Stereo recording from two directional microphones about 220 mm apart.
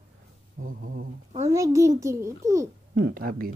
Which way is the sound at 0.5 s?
40° right (ahead or behind).